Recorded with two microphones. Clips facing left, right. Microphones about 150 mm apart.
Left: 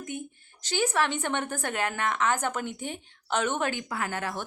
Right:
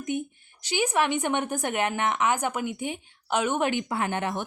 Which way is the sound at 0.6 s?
10° right (ahead or behind).